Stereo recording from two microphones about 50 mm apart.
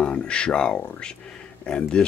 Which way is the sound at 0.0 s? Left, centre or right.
Centre.